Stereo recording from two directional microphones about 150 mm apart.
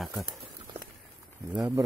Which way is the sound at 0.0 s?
Centre (ahead or behind).